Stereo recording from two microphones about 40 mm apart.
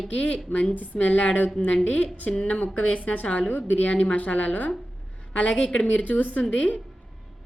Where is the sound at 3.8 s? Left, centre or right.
Left.